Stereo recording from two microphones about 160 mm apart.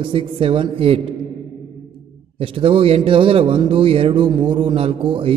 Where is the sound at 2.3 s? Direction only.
35° right (ahead or behind).